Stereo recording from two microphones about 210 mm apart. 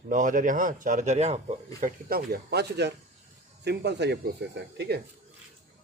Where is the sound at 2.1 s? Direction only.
45° right (ahead or behind).